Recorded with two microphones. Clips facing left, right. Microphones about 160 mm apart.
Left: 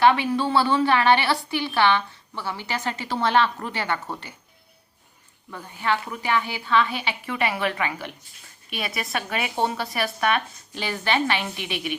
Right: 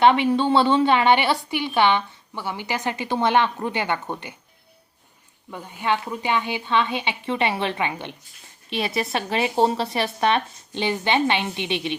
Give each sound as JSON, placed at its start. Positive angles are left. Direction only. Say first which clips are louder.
{"t": 0.0, "sound": "a woman's voice", "louder": "right 2 dB", "side_deg": -25}
{"t": 5.5, "sound": "a woman's voice", "louder": "right 1 dB", "side_deg": -20}